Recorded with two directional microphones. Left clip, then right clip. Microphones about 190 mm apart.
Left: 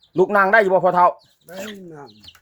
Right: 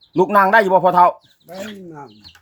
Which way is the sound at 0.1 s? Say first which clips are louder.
Right 2 dB; 10° left (ahead or behind).